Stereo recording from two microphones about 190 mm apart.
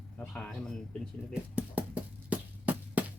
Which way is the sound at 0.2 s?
5° left (ahead or behind).